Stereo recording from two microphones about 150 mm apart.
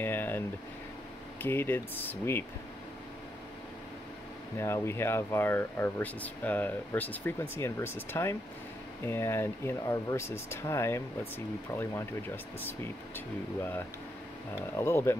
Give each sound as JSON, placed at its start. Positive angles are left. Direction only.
{"t": 0.0, "sound": "a sound", "side_deg": 15}
{"t": 1.4, "sound": "speech", "side_deg": 15}
{"t": 4.6, "sound": "speech", "side_deg": 15}
{"t": 14.8, "sound": "speech", "side_deg": 15}